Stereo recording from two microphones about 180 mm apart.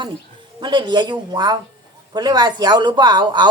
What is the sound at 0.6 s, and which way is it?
Speech, 25° right (ahead or behind).